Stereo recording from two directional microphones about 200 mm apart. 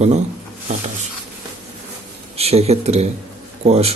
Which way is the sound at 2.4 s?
30° right (ahead or behind).